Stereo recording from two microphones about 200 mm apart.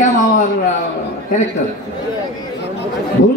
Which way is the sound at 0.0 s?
40° left (ahead or behind).